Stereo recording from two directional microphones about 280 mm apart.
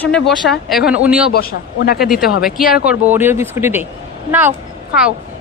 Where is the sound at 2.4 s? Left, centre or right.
Centre.